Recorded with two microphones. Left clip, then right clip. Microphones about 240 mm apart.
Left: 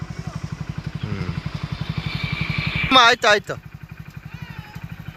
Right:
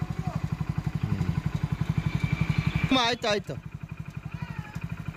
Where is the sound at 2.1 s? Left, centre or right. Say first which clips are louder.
Left 10 dB; centre.